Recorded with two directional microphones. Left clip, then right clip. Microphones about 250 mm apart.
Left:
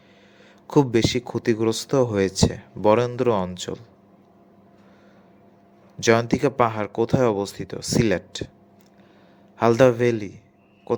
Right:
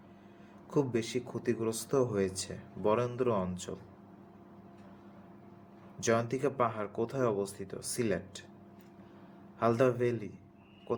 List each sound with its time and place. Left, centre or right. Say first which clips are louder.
0.7 s speech: left 13 dB; left
6.0 s speech: left 11 dB; left
9.6 s speech: left 12 dB; left